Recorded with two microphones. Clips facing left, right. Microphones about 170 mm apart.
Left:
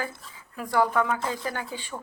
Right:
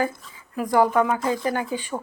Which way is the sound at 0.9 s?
15° right (ahead or behind).